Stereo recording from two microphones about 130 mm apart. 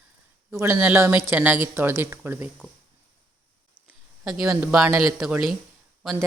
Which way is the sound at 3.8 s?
5° right (ahead or behind).